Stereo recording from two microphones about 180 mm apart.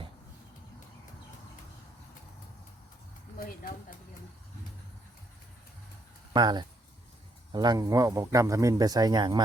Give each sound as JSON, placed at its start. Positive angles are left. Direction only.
{"t": 3.3, "sound": "speech", "side_deg": 55}
{"t": 6.3, "sound": "speech", "side_deg": -25}